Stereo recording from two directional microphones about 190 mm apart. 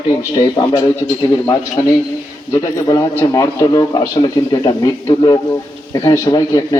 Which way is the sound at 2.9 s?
15° left (ahead or behind).